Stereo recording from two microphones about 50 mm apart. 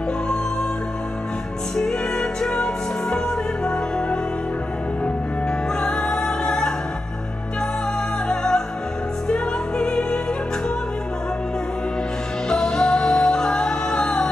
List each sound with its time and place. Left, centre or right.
1.8 s music: centre
5.8 s music: centre
8.3 s music: centre
12.4 s music: centre